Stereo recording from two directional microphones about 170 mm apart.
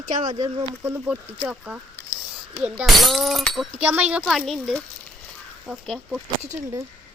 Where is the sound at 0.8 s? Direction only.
10° right (ahead or behind).